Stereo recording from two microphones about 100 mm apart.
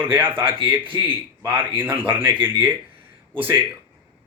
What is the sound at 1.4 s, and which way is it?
Speech, 20° right (ahead or behind).